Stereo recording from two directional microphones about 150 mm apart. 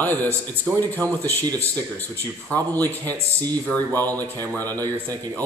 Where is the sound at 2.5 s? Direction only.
10° left (ahead or behind).